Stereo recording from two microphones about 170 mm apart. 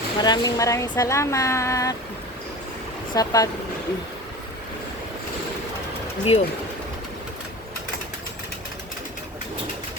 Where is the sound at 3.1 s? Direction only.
20° left (ahead or behind).